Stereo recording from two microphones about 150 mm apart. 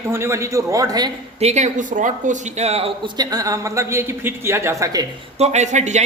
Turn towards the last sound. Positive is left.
turn(degrees=-50)  # may be behind; listen again after turning